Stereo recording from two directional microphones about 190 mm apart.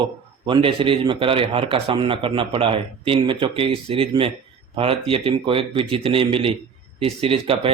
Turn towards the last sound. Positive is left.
turn(degrees=-30)  # may be behind; listen again after turning